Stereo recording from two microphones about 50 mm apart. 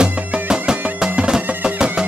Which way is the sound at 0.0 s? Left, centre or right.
Centre.